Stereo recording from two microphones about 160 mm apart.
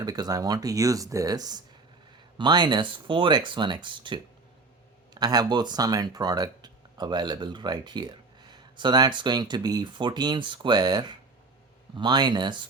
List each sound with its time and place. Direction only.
0.0 s speech: 25° right (ahead or behind)